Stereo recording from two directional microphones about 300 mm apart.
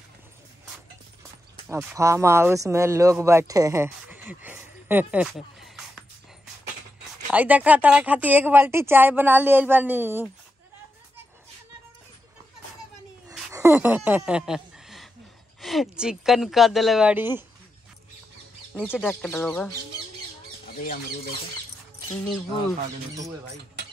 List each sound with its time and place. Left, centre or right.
1.7 s speech: centre
7.3 s speech: centre
13.5 s speech: centre
18.9 s speech: centre
20.8 s speech: left
22.2 s speech: centre